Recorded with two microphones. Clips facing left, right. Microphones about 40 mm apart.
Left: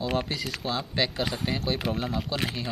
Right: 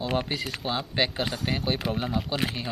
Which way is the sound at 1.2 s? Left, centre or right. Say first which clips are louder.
Even; centre.